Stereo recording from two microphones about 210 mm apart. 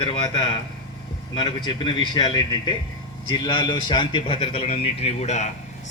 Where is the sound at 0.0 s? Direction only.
25° left (ahead or behind).